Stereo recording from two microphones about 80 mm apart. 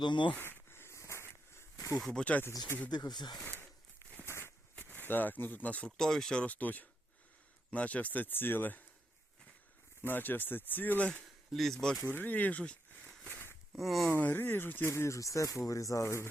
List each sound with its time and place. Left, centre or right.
0.0 s speech: left
0.3 s snake: left
2.0 s speech: centre
2.9 s speech: left
3.4 s a sound: left
6.0 s speech: centre; by 8.8 s left
10.0 s speech: left
11.5 s speech: centre
12.0 s speech: left
13.7 s speech: centre
14.1 s speech: left